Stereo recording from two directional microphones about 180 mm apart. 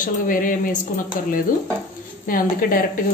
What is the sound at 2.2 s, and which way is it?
Speech, 55° left (ahead or behind).